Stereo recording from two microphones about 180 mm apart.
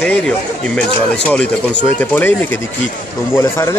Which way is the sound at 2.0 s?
10° left (ahead or behind).